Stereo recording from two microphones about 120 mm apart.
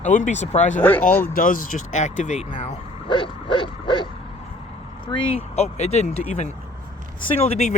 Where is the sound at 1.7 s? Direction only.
85° left.